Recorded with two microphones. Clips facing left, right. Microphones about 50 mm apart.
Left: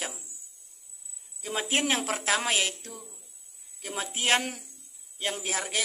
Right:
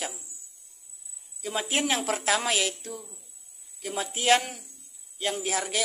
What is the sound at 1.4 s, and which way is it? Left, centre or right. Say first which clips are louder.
Speech: even; centre.